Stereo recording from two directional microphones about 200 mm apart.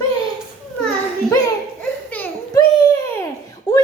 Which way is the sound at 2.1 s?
10° left (ahead or behind).